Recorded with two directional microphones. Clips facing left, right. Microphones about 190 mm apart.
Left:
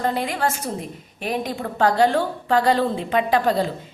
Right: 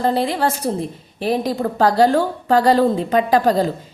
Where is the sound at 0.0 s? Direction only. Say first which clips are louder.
Right 5 dB; 30° right (ahead or behind).